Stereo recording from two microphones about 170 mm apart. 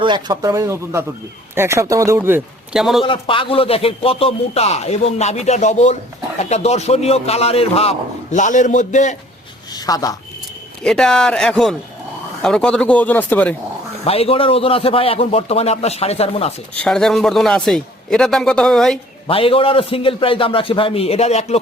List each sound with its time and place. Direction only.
0.0 s speech: 25° right (ahead or behind)
2.7 s a man's voice: centre (ahead or behind)
3.0 s speech: 30° left (ahead or behind); by 9.1 s 45° left (ahead or behind)
9.7 s speech: 20° left (ahead or behind)
10.8 s a man's voice: 5° left (ahead or behind)
14.0 s speech: 35° left (ahead or behind)
16.7 s a man's voice: 5° left (ahead or behind)
19.3 s speech: 30° left (ahead or behind)